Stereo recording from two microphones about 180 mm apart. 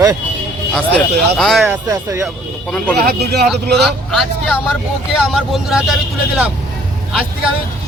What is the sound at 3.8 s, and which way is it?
Speech, centre (ahead or behind).